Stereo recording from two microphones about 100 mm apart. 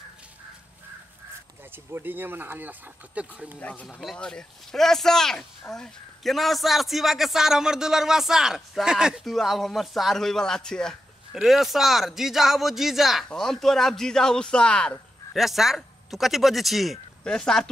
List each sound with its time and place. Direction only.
1.7 s speech: 20° right (ahead or behind)
3.5 s speech: 15° left (ahead or behind)
15.3 s speech: centre (ahead or behind)